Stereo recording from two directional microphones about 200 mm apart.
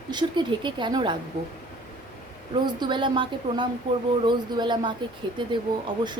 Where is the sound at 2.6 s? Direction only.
25° right (ahead or behind).